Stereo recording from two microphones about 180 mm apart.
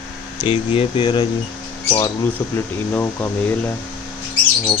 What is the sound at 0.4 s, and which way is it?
Speech, 30° left (ahead or behind).